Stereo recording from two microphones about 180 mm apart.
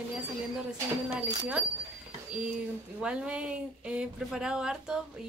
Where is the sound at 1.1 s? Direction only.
20° right (ahead or behind).